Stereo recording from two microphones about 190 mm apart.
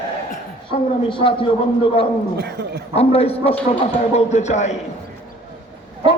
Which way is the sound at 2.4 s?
60° right (ahead or behind).